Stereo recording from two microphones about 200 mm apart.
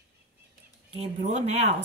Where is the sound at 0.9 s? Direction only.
30° right (ahead or behind).